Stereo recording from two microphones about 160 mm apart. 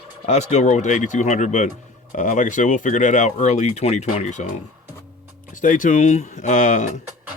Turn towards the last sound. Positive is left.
turn(degrees=50)  # may be behind; listen again after turning